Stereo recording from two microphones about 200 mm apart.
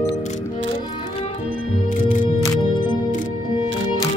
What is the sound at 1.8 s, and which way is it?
Music, 40° left (ahead or behind).